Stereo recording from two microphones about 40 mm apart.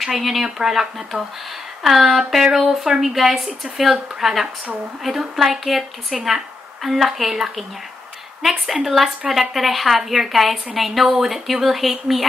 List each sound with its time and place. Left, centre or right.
0.0 s speech: centre